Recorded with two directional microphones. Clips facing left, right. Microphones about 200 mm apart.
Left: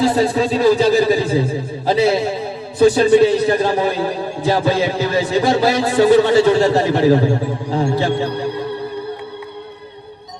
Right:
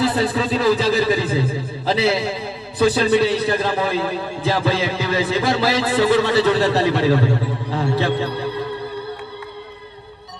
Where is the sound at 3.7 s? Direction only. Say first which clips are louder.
Left 3 dB; 30° left (ahead or behind).